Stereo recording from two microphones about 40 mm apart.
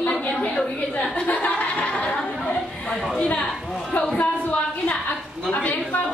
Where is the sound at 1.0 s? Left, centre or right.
Left.